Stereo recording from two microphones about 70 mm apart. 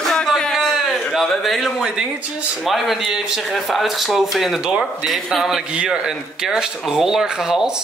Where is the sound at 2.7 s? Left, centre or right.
Centre.